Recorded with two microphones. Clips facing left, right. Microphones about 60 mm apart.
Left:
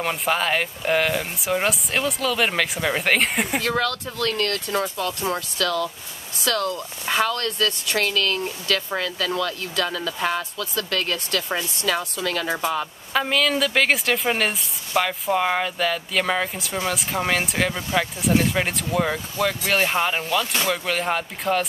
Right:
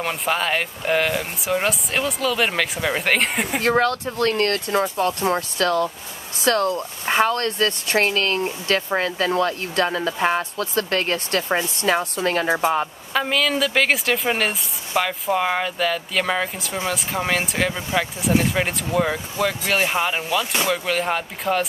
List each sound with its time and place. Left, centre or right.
0.0 s a woman's voice: centre
3.6 s speech: right
12.4 s speech: right
13.1 s a woman's voice: centre